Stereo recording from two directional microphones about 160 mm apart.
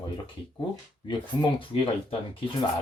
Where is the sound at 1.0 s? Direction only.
30° left (ahead or behind).